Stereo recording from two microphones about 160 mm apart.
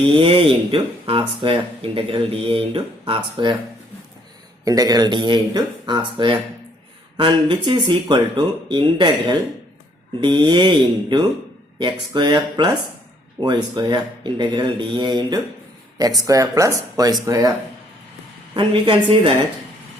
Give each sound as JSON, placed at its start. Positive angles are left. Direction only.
{"t": 0.2, "sound": "speech", "side_deg": -35}
{"t": 4.6, "sound": "speech", "side_deg": -25}
{"t": 18.5, "sound": "speech", "side_deg": -30}